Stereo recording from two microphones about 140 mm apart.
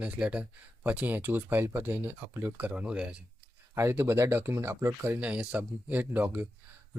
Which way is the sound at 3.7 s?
20° right (ahead or behind).